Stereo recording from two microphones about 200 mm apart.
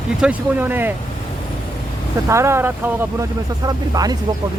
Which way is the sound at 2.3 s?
15° right (ahead or behind).